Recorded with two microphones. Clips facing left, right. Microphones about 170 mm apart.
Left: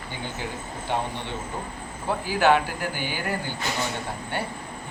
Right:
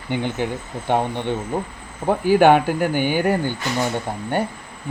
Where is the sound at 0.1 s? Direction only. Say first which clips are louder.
Right 12 dB; 65° right (ahead or behind).